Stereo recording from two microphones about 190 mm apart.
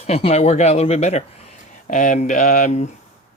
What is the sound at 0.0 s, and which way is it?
Speech, 30° left (ahead or behind).